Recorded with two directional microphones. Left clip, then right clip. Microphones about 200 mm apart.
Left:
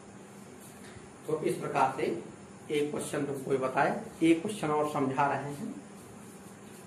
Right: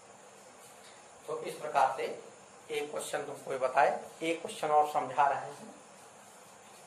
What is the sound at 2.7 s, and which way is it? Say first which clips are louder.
Speech: left 4 dB; 20° right (ahead or behind).